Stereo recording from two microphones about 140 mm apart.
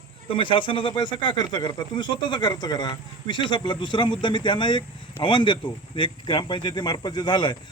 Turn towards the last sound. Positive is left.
turn(degrees=35)  # may be behind; listen again after turning